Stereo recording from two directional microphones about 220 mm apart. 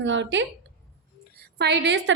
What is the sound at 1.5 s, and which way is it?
Speech, 50° right (ahead or behind).